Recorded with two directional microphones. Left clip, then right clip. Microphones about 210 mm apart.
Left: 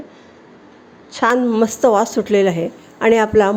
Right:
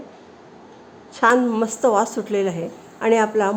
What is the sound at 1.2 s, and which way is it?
A woman's voice, 15° left (ahead or behind).